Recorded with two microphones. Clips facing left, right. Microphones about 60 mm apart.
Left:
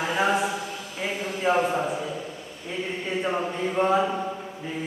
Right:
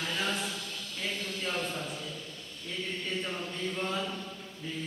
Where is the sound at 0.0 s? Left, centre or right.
Left.